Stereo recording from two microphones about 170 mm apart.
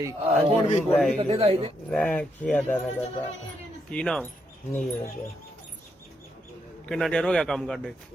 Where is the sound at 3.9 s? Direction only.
5° left (ahead or behind).